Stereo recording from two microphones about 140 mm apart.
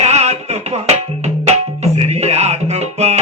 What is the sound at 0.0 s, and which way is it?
Tabla, 50° right (ahead or behind).